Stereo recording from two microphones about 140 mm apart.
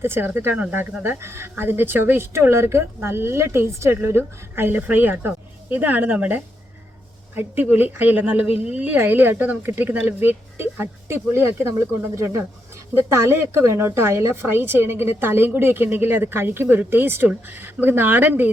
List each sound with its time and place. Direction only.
0.0 s speech: 15° right (ahead or behind)